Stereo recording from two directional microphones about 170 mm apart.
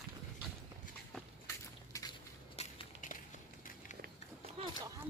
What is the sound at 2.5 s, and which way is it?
Crushing, 50° left (ahead or behind).